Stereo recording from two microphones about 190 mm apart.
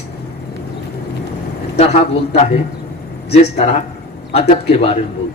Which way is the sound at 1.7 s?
35° left (ahead or behind).